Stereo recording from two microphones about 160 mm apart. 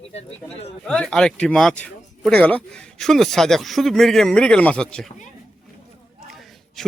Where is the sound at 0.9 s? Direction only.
5° left (ahead or behind).